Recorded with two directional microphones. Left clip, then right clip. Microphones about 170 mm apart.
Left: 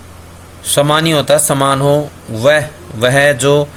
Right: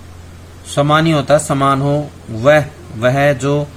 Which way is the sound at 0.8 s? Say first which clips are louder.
Left 1 dB; 40° left (ahead or behind).